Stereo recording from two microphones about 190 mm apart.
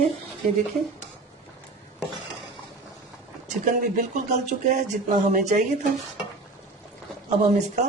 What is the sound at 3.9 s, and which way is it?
Speech, 40° right (ahead or behind).